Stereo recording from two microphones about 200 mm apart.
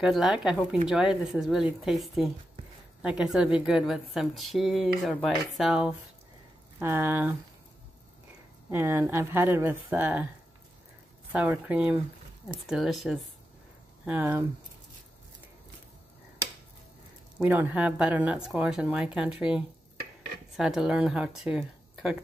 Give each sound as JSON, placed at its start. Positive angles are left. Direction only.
{"t": 0.0, "sound": "a woman's voice", "side_deg": -5}
{"t": 8.6, "sound": "speech", "side_deg": -10}
{"t": 11.3, "sound": "a woman's voice", "side_deg": -5}
{"t": 17.4, "sound": "a woman's voice", "side_deg": -10}